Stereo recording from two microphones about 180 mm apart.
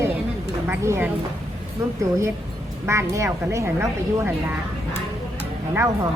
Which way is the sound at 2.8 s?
15° right (ahead or behind).